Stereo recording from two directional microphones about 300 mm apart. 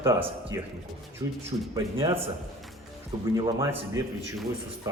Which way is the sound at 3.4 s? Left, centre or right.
Centre.